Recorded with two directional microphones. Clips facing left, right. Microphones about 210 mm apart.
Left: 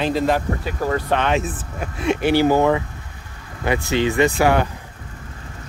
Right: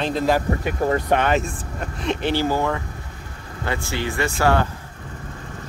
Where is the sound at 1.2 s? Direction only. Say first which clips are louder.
Even; centre (ahead or behind).